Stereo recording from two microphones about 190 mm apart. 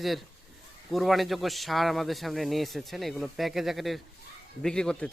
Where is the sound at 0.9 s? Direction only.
Centre (ahead or behind).